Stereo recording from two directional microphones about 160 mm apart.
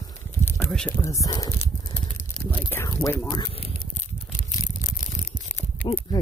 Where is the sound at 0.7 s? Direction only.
10° left (ahead or behind).